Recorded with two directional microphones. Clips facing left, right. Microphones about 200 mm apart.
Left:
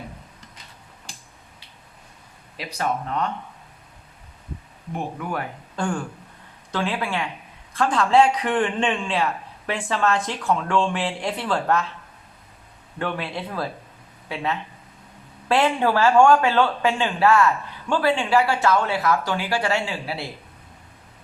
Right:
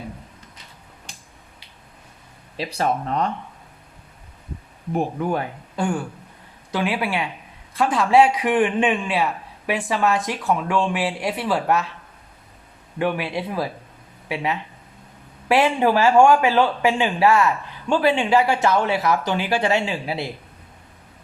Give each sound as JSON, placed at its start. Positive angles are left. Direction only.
{"t": 2.6, "sound": "speech", "side_deg": -30}
{"t": 4.9, "sound": "a man's voice", "side_deg": -25}
{"t": 5.7, "sound": "a man's voice", "side_deg": -10}
{"t": 13.0, "sound": "a man's voice", "side_deg": -15}